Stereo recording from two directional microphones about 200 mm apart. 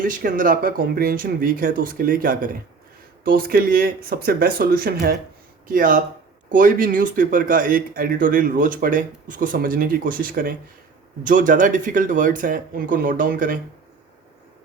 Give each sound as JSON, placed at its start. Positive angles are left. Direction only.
{"t": 0.0, "sound": "speech", "side_deg": -40}